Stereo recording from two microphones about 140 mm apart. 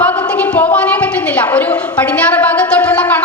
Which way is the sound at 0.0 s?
10° left (ahead or behind).